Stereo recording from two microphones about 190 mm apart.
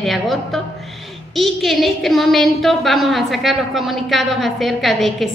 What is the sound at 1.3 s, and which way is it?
A woman's voice, centre (ahead or behind).